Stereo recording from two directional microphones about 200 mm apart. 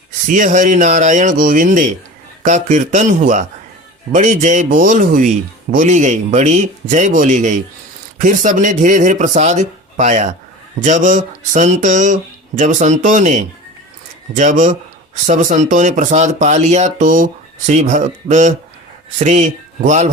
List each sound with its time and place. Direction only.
0.3 s speech: 40° right (ahead or behind)